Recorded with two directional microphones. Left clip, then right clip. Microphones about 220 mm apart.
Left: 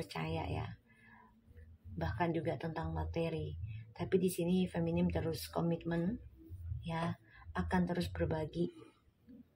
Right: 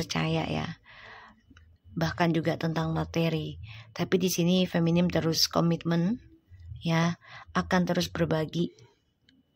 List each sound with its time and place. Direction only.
0.0 s speech: 30° right (ahead or behind)
2.0 s speech: 30° right (ahead or behind)